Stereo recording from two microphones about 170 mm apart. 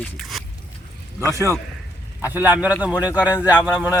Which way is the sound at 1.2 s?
15° right (ahead or behind).